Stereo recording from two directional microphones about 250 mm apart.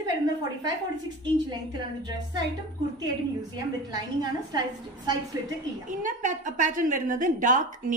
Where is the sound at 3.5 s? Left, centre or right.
Centre.